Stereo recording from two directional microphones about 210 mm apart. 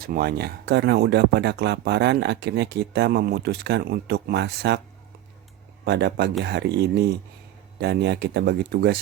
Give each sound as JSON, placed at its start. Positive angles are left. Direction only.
{"t": 0.0, "sound": "speech", "side_deg": -45}
{"t": 5.8, "sound": "speech", "side_deg": -50}